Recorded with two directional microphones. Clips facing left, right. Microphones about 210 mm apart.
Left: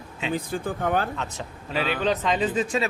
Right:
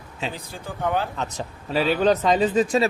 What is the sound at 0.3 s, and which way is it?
Speech, 50° left (ahead or behind).